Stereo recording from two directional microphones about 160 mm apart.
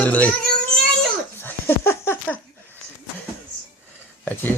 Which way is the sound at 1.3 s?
15° left (ahead or behind).